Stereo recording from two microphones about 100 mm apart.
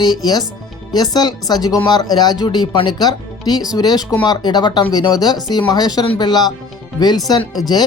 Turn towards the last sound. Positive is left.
turn(degrees=45)  # may be behind; listen again after turning